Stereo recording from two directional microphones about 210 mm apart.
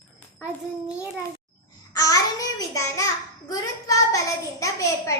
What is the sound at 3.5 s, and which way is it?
Speech, 15° left (ahead or behind).